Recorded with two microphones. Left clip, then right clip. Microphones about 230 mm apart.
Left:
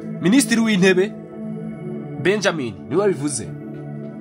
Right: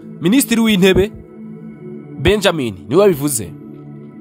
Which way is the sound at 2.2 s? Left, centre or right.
Right.